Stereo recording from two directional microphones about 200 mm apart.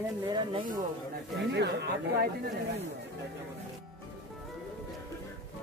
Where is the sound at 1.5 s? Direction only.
55° right (ahead or behind).